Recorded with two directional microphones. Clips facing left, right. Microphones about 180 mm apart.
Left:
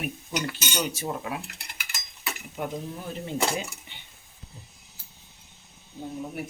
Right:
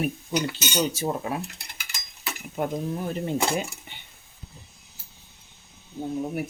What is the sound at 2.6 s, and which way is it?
Speech, 50° right (ahead or behind).